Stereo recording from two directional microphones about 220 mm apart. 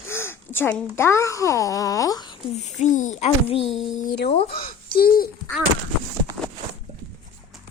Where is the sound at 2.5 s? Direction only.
30° left (ahead or behind).